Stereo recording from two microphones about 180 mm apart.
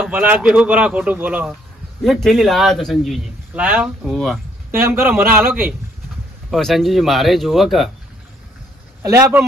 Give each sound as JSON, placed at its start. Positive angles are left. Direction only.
{"t": 0.1, "sound": "a man's voice", "side_deg": -10}
{"t": 2.0, "sound": "a man's voice", "side_deg": 0}
{"t": 4.7, "sound": "a man's voice", "side_deg": -15}
{"t": 6.5, "sound": "a man's voice", "side_deg": 0}
{"t": 9.0, "sound": "a man's voice", "side_deg": -15}